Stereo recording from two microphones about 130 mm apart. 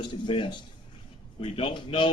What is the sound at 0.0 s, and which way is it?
A man's voice, 40° left (ahead or behind).